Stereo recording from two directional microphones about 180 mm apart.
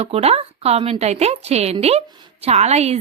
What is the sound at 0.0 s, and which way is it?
Speech, 35° right (ahead or behind).